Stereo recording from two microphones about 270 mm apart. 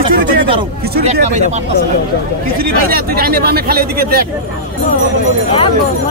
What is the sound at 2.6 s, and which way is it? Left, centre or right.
Speech, right.